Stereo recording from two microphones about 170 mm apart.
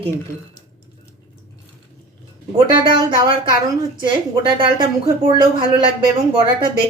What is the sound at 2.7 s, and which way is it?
Speech, 25° right (ahead or behind).